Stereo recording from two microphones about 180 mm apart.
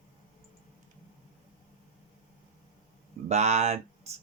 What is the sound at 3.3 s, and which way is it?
Speech, 35° right (ahead or behind).